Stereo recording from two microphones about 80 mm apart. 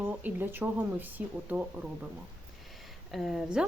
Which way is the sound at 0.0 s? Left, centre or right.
Right.